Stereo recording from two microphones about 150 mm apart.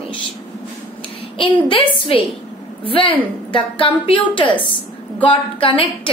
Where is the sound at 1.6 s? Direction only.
35° left (ahead or behind).